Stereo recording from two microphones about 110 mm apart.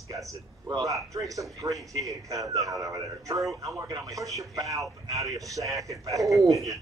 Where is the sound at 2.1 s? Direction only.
30° right (ahead or behind).